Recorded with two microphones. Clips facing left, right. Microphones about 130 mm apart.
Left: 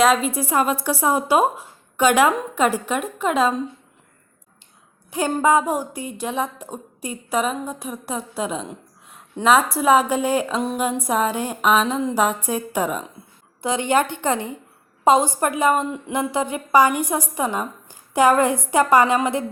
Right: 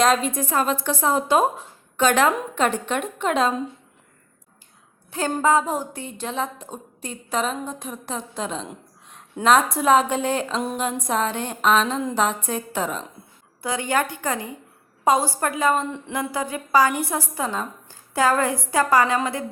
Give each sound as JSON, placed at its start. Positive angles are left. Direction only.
{"t": 0.0, "sound": "a woman's voice", "side_deg": 5}
{"t": 5.1, "sound": "a woman's voice", "side_deg": 15}
{"t": 13.6, "sound": "a woman's voice", "side_deg": 20}